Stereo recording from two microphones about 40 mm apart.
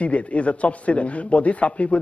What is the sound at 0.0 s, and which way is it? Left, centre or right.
A man's voice, left.